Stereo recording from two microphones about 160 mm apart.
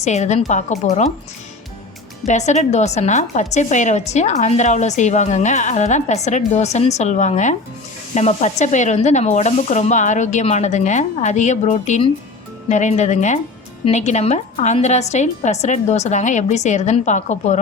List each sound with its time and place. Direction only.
0.0 s a woman's voice: 45° left (ahead or behind)
2.2 s a woman's voice: 45° left (ahead or behind)